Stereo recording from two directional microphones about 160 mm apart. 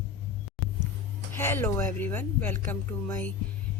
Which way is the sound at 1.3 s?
15° left (ahead or behind).